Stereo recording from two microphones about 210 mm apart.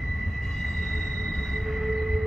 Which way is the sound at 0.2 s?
Centre (ahead or behind).